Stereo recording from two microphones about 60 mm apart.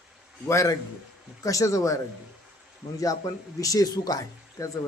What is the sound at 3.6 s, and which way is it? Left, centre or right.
Speech, left.